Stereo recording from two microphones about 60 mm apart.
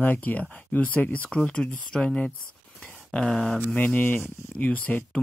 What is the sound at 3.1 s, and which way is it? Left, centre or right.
Speech, centre.